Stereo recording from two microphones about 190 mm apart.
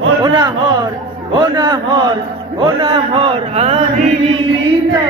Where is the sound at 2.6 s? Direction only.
25° right (ahead or behind).